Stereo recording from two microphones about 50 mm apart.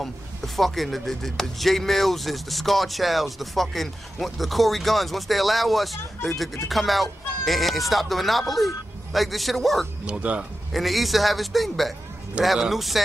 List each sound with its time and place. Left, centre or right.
0.6 s speech: centre
10.0 s speech: right
10.7 s speech: centre